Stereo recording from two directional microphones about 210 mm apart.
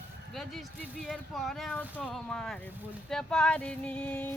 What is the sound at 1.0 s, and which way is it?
Speech, centre (ahead or behind).